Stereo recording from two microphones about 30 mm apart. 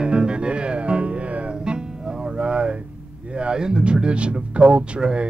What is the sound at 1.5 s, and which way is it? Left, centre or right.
Music, right.